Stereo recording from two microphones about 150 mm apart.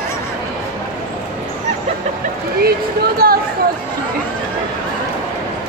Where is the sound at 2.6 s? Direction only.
90° right.